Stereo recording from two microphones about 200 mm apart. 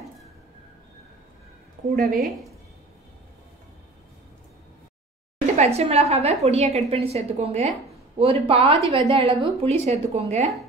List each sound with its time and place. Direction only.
2.0 s a woman's voice: centre (ahead or behind)
5.6 s a woman's voice: 30° right (ahead or behind)